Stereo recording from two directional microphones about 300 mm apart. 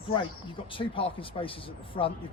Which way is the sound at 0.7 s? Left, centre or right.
Centre.